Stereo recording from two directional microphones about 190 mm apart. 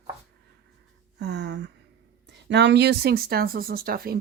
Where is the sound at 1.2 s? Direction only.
60° right (ahead or behind).